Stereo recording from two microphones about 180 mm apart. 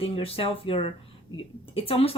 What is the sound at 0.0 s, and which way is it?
Speech, 30° left (ahead or behind).